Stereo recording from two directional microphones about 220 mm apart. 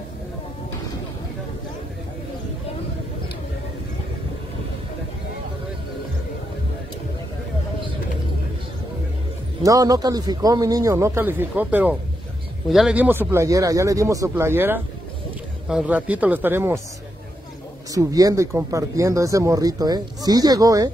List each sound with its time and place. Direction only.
9.6 s speech: 15° right (ahead or behind)
17.9 s speech: 15° right (ahead or behind)